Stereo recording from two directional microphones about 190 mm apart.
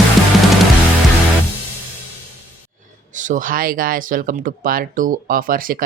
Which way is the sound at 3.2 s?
40° right (ahead or behind).